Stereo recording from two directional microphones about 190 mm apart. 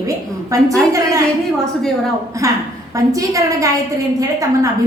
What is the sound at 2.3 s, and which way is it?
A woman's voice, 15° right (ahead or behind).